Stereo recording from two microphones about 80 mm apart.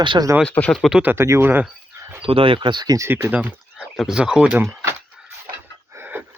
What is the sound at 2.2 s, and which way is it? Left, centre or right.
Speech, right.